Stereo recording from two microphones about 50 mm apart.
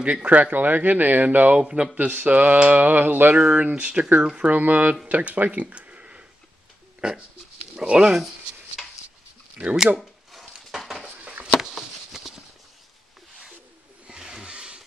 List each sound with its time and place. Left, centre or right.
0.0 s speech: right
1.6 s speech: centre
2.0 s speech: right
3.3 s speech: right
4.5 s speech: right
8.8 s a sound: centre
9.6 s speech: right
9.9 s a sound: centre
14.0 s a sound: centre